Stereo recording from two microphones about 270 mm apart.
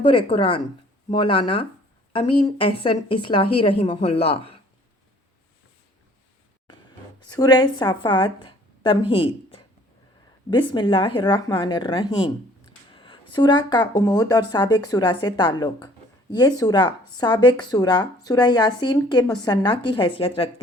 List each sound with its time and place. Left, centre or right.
0.0 s a woman's voice: centre
7.2 s a woman's voice: centre